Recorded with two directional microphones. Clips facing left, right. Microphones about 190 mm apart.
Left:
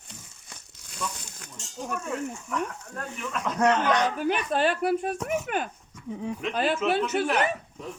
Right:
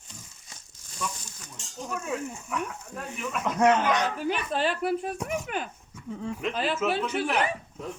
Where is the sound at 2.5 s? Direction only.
5° right (ahead or behind).